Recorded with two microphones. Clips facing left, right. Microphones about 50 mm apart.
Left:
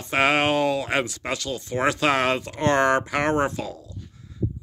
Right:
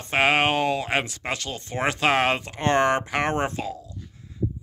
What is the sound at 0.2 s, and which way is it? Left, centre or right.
Speech, right.